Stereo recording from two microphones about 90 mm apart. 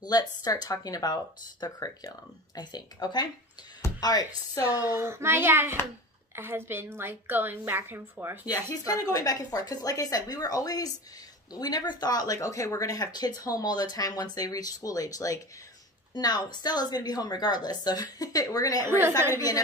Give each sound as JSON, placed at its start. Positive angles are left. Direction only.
{"t": 0.0, "sound": "speech", "side_deg": 45}
{"t": 4.6, "sound": "a woman's voice", "side_deg": -25}
{"t": 8.5, "sound": "speech", "side_deg": 45}
{"t": 16.1, "sound": "speech", "side_deg": 50}
{"t": 18.9, "sound": "a woman's voice", "side_deg": -25}
{"t": 19.3, "sound": "speech", "side_deg": 40}